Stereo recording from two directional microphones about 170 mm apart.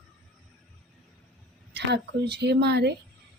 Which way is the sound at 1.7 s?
75° right (ahead or behind).